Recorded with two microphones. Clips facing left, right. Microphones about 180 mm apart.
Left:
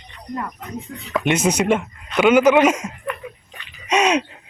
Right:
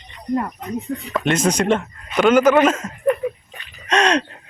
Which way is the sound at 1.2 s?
10° left (ahead or behind).